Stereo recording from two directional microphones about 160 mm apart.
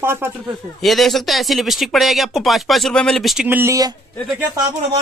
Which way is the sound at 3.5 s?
15° right (ahead or behind).